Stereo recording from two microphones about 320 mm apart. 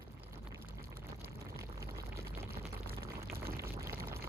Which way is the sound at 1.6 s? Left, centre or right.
Centre.